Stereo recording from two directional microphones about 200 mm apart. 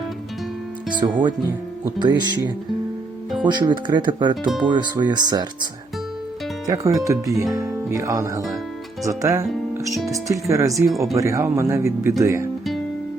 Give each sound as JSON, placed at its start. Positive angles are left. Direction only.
{"t": 0.9, "sound": "speech", "side_deg": -25}
{"t": 3.4, "sound": "speech", "side_deg": -20}
{"t": 6.7, "sound": "speech", "side_deg": -15}